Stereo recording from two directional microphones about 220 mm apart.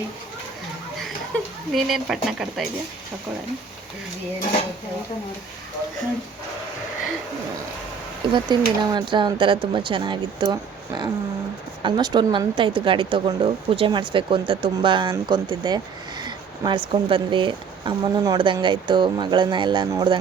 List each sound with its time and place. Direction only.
1.7 s speech: centre (ahead or behind)
8.3 s speech: 20° right (ahead or behind)
16.2 s a sound: 20° right (ahead or behind)
16.9 s speech: 20° right (ahead or behind)